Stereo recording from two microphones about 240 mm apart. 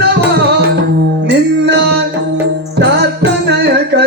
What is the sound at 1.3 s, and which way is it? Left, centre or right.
Music, right.